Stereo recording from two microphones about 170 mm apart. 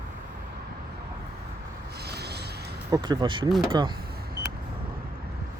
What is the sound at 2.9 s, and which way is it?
Speech, 25° right (ahead or behind).